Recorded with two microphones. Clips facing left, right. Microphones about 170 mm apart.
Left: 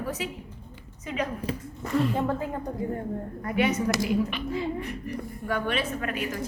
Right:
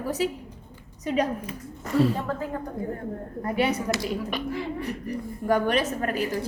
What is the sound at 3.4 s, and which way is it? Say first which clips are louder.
A woman's voice: even; 35° right (ahead or behind).